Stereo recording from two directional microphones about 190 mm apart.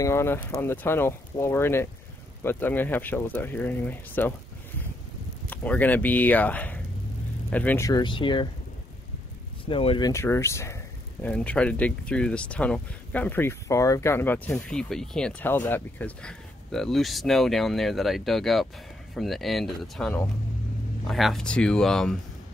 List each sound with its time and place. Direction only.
0.0 s speech: 15° left (ahead or behind)
5.5 s speech: 10° left (ahead or behind); by 8.5 s 25° left (ahead or behind)
9.7 s speech: 30° left (ahead or behind); by 22.1 s 5° left (ahead or behind)